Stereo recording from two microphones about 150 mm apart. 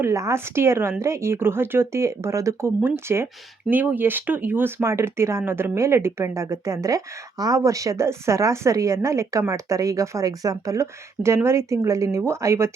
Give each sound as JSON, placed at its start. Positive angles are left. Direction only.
{"t": 0.0, "sound": "a woman's voice", "side_deg": -20}